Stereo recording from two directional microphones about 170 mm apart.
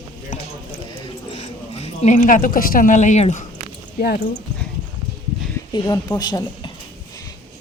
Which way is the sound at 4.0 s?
60° left (ahead or behind).